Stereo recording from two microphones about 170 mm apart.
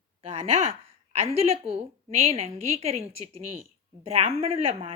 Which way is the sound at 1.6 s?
35° right (ahead or behind).